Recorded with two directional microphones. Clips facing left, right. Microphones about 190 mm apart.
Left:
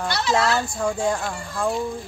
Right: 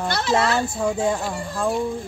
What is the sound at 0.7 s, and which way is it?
A woman's voice, 5° right (ahead or behind).